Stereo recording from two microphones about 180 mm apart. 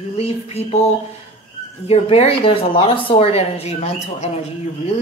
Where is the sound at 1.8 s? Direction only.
35° left (ahead or behind).